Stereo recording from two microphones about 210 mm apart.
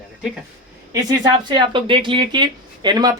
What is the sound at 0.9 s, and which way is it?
Speech, 20° right (ahead or behind).